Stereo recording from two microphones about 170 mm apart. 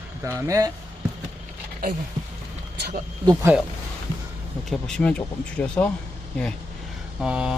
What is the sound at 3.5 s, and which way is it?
Speech, 10° right (ahead or behind).